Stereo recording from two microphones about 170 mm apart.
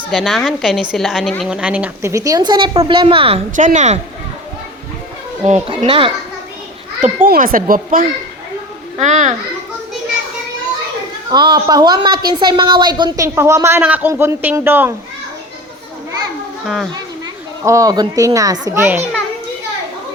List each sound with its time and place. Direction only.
0.1 s a woman's voice: centre (ahead or behind); by 3.4 s 30° right (ahead or behind)
3.5 s a child's voice: 45° right (ahead or behind)
5.5 s speech: 35° right (ahead or behind)
7.0 s a child's voice: 50° right (ahead or behind)
11.3 s a woman's voice: 25° right (ahead or behind)
16.6 s a child's voice: centre (ahead or behind)
17.6 s a woman's voice: 20° right (ahead or behind)
18.8 s a woman's voice: 10° right (ahead or behind)